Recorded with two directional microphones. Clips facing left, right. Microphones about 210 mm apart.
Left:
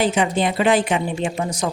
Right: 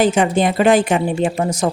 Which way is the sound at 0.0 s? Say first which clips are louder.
Right 4 dB; 45° right (ahead or behind).